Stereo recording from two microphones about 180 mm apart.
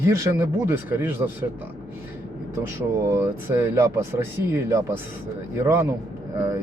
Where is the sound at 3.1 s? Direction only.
15° right (ahead or behind).